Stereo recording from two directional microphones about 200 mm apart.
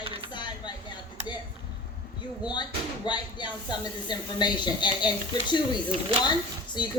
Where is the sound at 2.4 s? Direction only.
20° left (ahead or behind).